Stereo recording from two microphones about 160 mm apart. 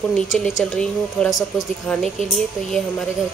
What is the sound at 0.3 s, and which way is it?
Speech, centre (ahead or behind).